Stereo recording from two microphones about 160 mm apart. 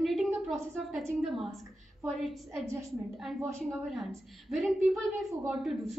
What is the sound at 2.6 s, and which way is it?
Speech, 20° right (ahead or behind).